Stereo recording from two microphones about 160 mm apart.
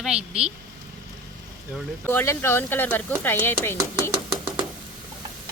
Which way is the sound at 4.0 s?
30° right (ahead or behind).